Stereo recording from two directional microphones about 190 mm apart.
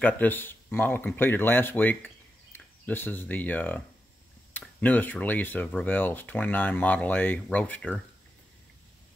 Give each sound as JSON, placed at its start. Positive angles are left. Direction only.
{"t": 0.0, "sound": "speech", "side_deg": 10}